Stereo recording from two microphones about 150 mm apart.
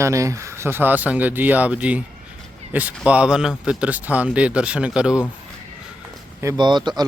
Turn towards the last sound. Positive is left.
turn(degrees=-30)  # may be behind; listen again after turning